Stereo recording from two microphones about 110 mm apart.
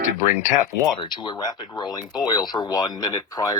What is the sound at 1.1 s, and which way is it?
Speech, 45° left (ahead or behind).